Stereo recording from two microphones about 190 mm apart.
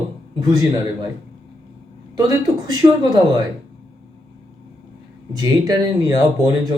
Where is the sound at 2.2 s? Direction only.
20° right (ahead or behind).